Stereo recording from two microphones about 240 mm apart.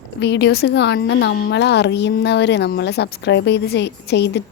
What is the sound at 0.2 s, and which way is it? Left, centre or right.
A woman's voice, left.